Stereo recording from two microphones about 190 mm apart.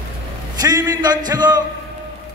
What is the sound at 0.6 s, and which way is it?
Music, 20° right (ahead or behind).